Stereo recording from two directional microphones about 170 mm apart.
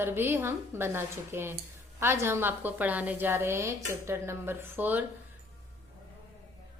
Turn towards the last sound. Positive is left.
turn(degrees=-10)  # may be behind; listen again after turning